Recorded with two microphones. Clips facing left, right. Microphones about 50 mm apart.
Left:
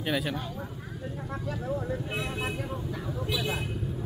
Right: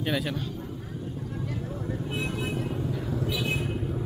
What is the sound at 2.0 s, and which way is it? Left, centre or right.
Speech, left.